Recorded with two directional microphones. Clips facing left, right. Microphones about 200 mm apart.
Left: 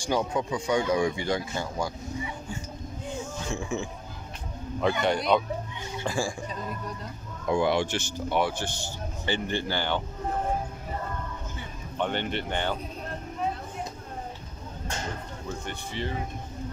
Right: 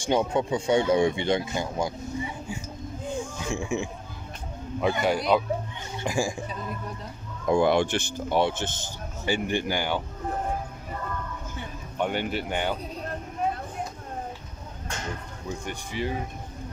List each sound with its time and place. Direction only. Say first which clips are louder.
0.0 s speech: right 3 dB; 25° right (ahead or behind)
3.5 s speech: right 3 dB; 15° right (ahead or behind)
7.4 s speech: right 3 dB; 50° right (ahead or behind)
8.4 s speech: right 3 dB; 25° right (ahead or behind)
12.0 s speech: right 2 dB; 10° right (ahead or behind)
15.6 s speech: right 4 dB; 10° right (ahead or behind)